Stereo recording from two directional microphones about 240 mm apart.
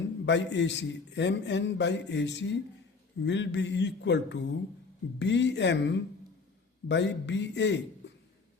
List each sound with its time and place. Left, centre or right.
0.3 s a man's voice: left